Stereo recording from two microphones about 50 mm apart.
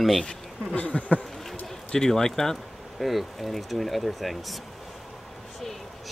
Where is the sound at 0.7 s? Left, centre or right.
Left.